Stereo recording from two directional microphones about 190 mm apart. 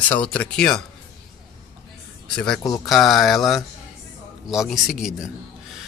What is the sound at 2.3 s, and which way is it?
Speech, 5° left (ahead or behind).